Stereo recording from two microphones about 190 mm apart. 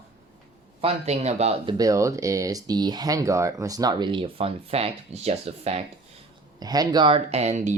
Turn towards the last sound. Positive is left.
turn(degrees=-40)  # may be behind; listen again after turning